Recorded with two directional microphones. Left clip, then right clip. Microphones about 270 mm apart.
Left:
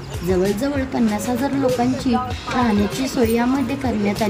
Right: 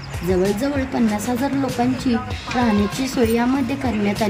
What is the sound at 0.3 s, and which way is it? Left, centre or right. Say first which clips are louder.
Speech: even; centre.